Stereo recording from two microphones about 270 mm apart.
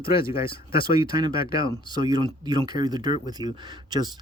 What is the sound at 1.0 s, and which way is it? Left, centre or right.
Speech, centre.